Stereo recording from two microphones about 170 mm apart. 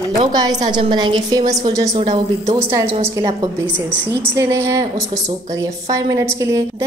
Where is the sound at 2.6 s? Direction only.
20° right (ahead or behind).